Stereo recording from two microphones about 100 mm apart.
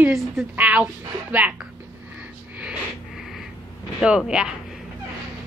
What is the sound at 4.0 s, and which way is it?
Speech, 5° right (ahead or behind).